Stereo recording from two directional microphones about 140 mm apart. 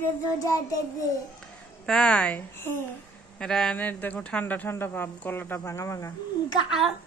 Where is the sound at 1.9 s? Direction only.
5° left (ahead or behind); by 6.1 s 20° left (ahead or behind).